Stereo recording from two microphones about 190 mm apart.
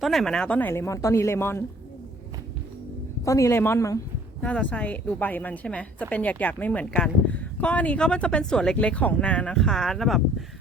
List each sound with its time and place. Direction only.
0.0 s a woman's voice: centre (ahead or behind)
3.2 s a woman's voice: 15° left (ahead or behind); by 10.2 s centre (ahead or behind)